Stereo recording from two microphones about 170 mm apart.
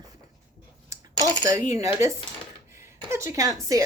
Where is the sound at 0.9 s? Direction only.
20° right (ahead or behind).